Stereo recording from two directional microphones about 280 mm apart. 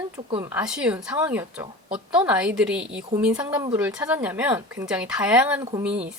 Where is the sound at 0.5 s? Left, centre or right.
Centre.